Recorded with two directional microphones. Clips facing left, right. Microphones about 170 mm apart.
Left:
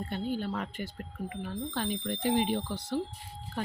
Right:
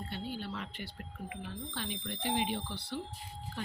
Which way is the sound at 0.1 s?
45° left (ahead or behind).